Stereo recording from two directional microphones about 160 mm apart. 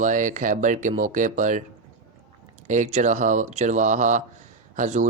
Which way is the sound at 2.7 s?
50° right (ahead or behind).